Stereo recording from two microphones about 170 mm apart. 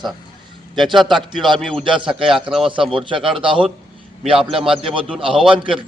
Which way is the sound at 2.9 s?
30° right (ahead or behind).